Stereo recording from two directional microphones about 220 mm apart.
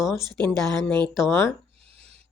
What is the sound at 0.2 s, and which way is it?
Speech, 20° right (ahead or behind).